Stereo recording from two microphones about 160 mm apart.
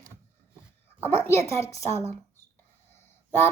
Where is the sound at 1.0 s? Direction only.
15° left (ahead or behind).